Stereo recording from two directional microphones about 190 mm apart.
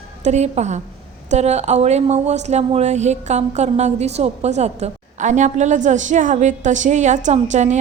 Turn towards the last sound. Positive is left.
turn(degrees=-40)  # may be behind; listen again after turning